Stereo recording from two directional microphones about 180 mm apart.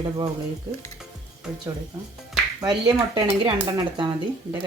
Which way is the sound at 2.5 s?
25° right (ahead or behind).